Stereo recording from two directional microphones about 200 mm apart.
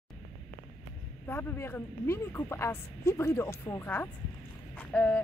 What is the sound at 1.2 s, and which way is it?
A woman's voice, 10° left (ahead or behind).